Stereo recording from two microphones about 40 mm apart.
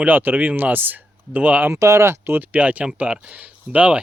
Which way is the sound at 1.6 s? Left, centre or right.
Right.